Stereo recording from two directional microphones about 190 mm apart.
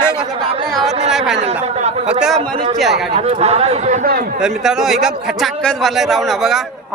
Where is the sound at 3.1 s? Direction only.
35° right (ahead or behind).